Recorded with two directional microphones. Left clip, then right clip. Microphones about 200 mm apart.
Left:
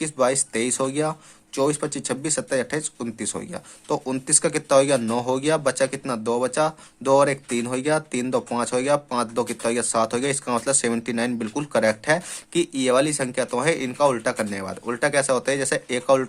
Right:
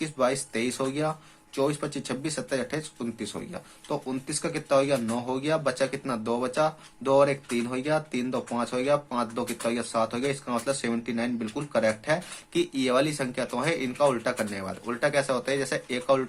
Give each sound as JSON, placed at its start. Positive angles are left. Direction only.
{"t": 0.0, "sound": "speech", "side_deg": 35}